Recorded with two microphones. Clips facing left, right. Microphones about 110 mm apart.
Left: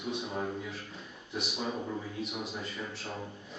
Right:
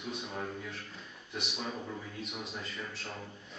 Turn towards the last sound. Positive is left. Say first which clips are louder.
# left 3 dB
turn(degrees=5)  # may be behind; listen again after turning